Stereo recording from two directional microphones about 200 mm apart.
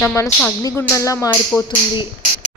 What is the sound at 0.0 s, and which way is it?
Speech, 10° left (ahead or behind).